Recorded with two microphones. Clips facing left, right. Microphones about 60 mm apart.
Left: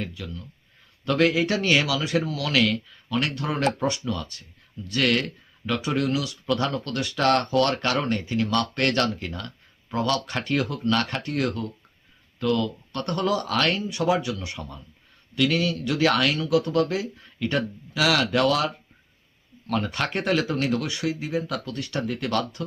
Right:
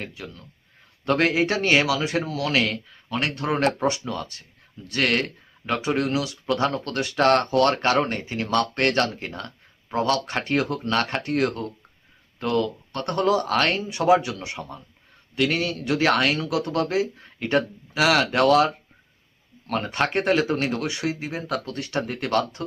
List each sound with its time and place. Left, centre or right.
0.2 s speech: right
20.9 s speech: right